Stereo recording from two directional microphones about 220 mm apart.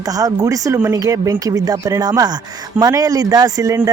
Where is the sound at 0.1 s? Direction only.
15° right (ahead or behind).